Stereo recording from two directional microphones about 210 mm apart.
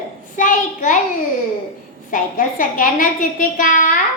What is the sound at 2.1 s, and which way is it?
A child's voice, 40° left (ahead or behind).